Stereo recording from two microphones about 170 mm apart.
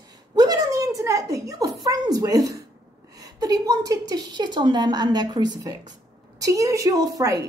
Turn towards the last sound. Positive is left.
turn(degrees=-20)  # may be behind; listen again after turning